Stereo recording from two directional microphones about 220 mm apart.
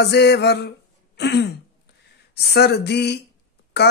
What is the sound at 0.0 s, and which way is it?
Speech, 50° left (ahead or behind).